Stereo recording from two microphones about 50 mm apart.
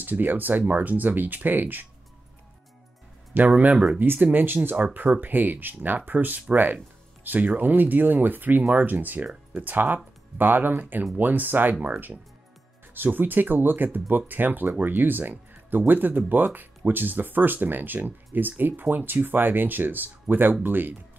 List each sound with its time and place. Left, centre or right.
0.0 s speech: right
3.3 s speech: right
4.0 s speech: right